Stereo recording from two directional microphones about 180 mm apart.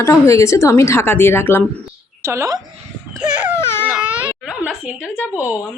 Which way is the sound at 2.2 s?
15° right (ahead or behind).